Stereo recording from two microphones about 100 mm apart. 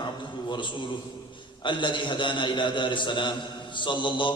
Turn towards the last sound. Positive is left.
turn(degrees=55)  # may be behind; listen again after turning